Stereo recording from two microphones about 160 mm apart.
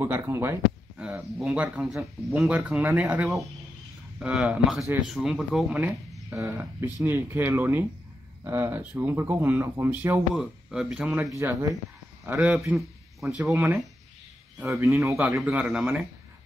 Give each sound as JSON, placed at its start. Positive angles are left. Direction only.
{"t": 0.0, "sound": "speech", "side_deg": -15}
{"t": 6.3, "sound": "speech", "side_deg": -15}
{"t": 11.3, "sound": "speech", "side_deg": -20}
{"t": 12.3, "sound": "a man's voice", "side_deg": -5}
{"t": 13.5, "sound": "speech", "side_deg": -15}